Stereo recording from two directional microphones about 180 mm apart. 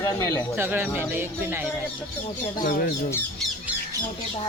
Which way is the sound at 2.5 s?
55° left (ahead or behind).